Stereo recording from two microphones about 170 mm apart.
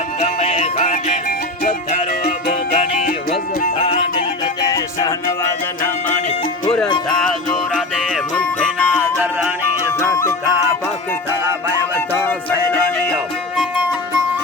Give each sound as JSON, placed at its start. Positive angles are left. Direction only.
{"t": 0.2, "sound": "music", "side_deg": 40}
{"t": 4.6, "sound": "music", "side_deg": 20}
{"t": 7.1, "sound": "music", "side_deg": 5}
{"t": 10.0, "sound": "music", "side_deg": 15}
{"t": 11.9, "sound": "music", "side_deg": 10}